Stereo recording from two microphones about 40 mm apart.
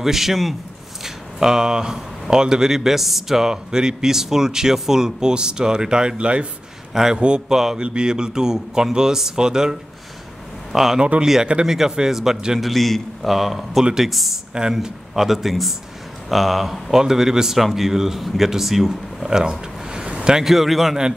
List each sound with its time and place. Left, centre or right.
0.0 s a man's voice: centre; by 6.4 s right
6.9 s a man's voice: centre
7.2 s a man's voice: right
7.4 s speech: centre
7.8 s a man's voice: right; by 14.4 s centre
14.5 s a man's voice: centre
16.9 s speech: centre
20.5 s a man's voice: centre